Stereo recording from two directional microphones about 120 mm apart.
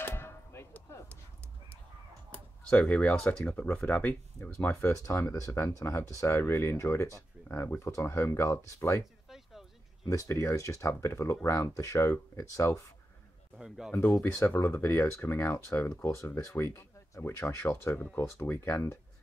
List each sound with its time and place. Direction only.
0.0 s a sound: 20° left (ahead or behind)
2.7 s speech: 10° left (ahead or behind)
5.0 s speech: 25° left (ahead or behind)
9.3 s a sound: centre (ahead or behind)
10.0 s speech: 25° left (ahead or behind)
13.6 s speech: 5° right (ahead or behind)
14.2 s speech: 20° left (ahead or behind)